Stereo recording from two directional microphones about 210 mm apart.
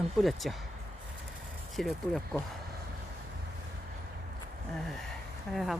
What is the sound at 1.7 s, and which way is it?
Speech, centre (ahead or behind).